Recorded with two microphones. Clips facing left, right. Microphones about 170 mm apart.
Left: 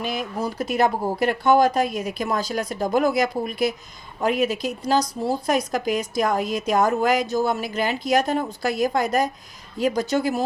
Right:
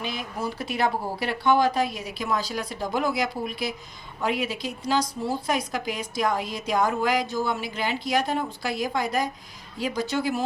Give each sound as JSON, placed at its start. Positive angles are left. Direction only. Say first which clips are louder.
{"t": 0.0, "sound": "a woman's voice", "louder": "left 4 dB", "side_deg": 45}